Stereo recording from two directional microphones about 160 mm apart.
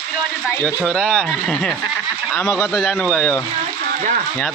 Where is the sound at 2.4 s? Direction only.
15° left (ahead or behind).